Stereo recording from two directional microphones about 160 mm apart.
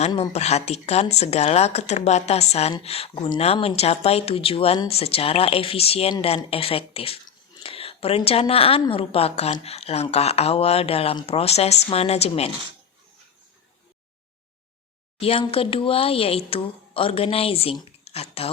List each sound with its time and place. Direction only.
0.1 s a woman's voice: 40° left (ahead or behind)
15.2 s a woman's voice: 35° left (ahead or behind)